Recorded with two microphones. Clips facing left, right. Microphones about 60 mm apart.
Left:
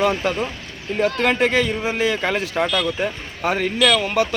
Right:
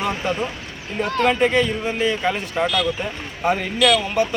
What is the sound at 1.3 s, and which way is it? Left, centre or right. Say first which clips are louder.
A man's voice: even; left.